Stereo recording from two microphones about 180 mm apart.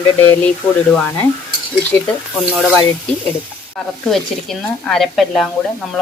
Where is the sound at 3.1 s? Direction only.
5° left (ahead or behind).